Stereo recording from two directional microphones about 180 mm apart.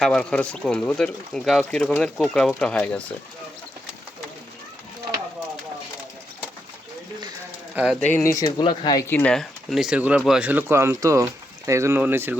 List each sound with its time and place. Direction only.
0.0 s speech: 5° left (ahead or behind)
8.1 s speech: 15° left (ahead or behind)
9.0 s speech: 5° left (ahead or behind); by 12.4 s 10° right (ahead or behind)